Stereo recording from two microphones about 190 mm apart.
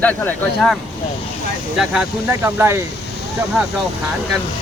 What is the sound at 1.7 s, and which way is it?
Speech, centre (ahead or behind).